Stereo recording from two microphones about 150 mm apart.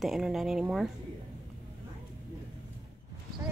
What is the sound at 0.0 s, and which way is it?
Speech, centre (ahead or behind).